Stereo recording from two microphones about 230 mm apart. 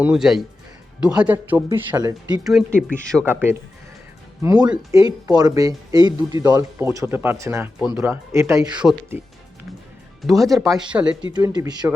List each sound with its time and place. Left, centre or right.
0.0 s speech: centre
2.4 s speech: centre
10.2 s speech: centre
11.3 s speech: centre